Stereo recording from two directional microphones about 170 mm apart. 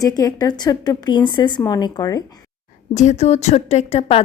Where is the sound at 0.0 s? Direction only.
20° left (ahead or behind).